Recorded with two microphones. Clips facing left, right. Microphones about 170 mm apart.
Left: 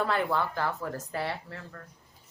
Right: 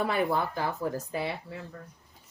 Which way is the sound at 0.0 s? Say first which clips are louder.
Right 1 dB; 15° right (ahead or behind).